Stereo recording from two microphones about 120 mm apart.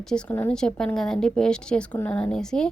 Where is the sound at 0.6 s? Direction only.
5° left (ahead or behind).